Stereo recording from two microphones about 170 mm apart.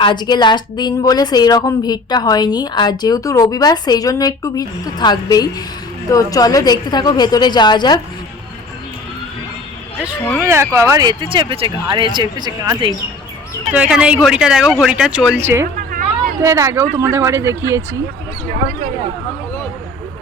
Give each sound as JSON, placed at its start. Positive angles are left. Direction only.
{"t": 0.0, "sound": "a woman's voice", "side_deg": 25}
{"t": 10.4, "sound": "speech", "side_deg": -15}
{"t": 13.7, "sound": "speech", "side_deg": -5}